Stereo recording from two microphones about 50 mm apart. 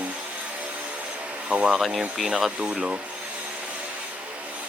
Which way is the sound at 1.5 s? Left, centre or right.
Right.